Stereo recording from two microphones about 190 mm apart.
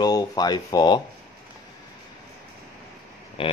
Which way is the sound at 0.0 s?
20° left (ahead or behind).